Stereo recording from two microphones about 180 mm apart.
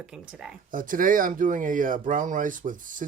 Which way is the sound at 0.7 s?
50° right (ahead or behind).